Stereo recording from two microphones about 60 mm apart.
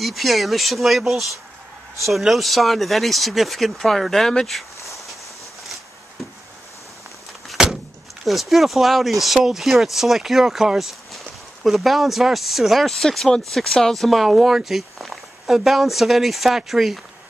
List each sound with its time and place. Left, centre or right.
0.0 s speech: centre
7.4 s vehicle: centre
8.3 s speech: centre